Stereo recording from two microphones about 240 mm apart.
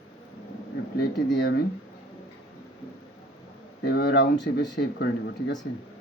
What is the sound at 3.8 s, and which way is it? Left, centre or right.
Speech, left.